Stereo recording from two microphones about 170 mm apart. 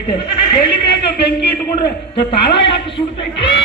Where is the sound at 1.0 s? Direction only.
70° left (ahead or behind).